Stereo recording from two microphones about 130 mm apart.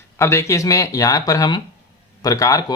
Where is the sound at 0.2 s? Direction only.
20° left (ahead or behind).